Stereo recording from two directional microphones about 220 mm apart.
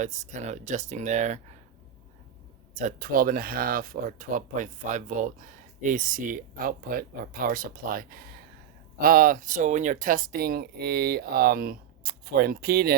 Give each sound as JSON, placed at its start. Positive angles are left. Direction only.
{"t": 0.0, "sound": "speech", "side_deg": -35}
{"t": 2.7, "sound": "speech", "side_deg": -35}